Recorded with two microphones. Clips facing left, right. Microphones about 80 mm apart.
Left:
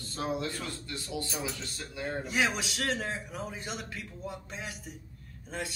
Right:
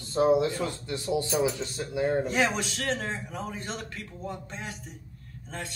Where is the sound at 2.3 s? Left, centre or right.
Centre.